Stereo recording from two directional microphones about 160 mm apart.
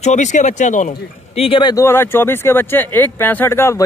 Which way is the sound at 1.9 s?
15° left (ahead or behind).